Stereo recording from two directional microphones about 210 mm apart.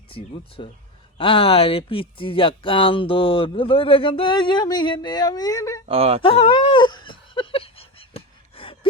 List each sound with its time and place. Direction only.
0.1 s speech: 25° left (ahead or behind)
5.9 s speech: 30° right (ahead or behind)
6.2 s a sound: 25° left (ahead or behind)